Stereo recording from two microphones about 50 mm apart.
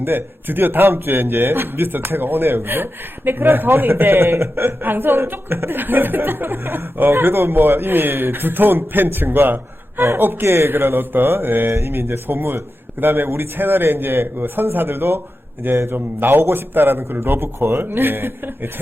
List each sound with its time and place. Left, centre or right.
0.0 s speech: right
11.7 s speech: right